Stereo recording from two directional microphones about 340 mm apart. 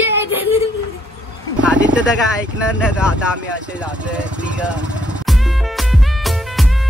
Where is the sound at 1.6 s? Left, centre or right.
Centre.